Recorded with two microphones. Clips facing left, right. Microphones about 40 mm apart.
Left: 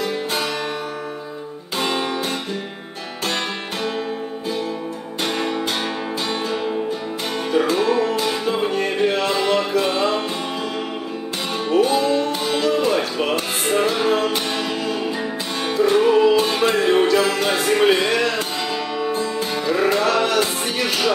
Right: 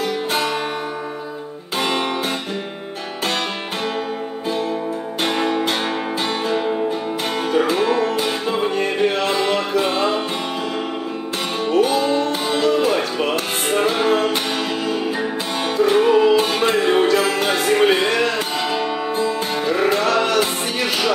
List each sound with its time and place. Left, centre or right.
0.0 s music: right
5.2 s music: centre
11.8 s music: right; by 14.3 s centre
15.9 s music: centre
18.7 s music: centre